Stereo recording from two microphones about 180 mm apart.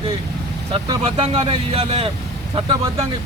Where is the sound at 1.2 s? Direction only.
30° right (ahead or behind).